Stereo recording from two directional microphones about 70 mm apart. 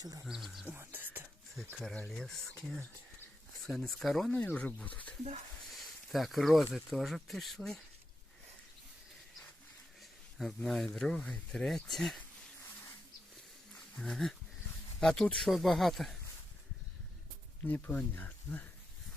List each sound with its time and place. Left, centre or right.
0.0 s speech: right
0.3 s speech: centre
0.8 s whispering: right
2.0 s speech: centre
4.5 s speech: centre
5.7 s speech: centre
10.3 s speech: centre
13.7 s wild animals: centre
15.0 s speech: centre
17.7 s speech: left